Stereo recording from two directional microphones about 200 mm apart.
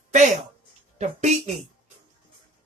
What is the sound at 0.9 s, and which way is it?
Speech, 35° right (ahead or behind).